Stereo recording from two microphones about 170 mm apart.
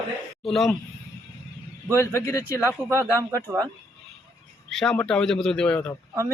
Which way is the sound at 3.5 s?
15° right (ahead or behind).